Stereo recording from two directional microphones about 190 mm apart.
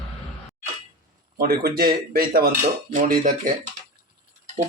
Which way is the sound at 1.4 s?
50° right (ahead or behind).